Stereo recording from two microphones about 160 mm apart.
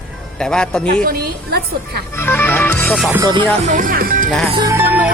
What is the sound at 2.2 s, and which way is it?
Music, 15° left (ahead or behind).